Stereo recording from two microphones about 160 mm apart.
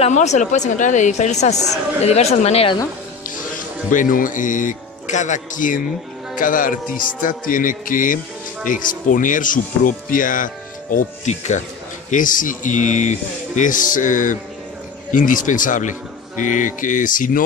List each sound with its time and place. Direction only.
0.0 s a man's voice: 45° left (ahead or behind)
3.9 s a man's voice: 55° left (ahead or behind)